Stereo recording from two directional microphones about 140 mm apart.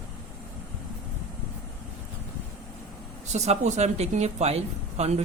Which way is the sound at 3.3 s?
55° right (ahead or behind).